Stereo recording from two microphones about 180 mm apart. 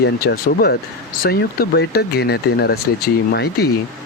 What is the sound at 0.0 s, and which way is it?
Speech, 65° left (ahead or behind).